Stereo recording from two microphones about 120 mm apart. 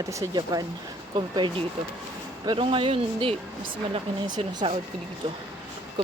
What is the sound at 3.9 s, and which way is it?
Speech, 40° right (ahead or behind).